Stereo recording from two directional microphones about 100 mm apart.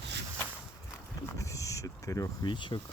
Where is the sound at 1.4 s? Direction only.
30° left (ahead or behind).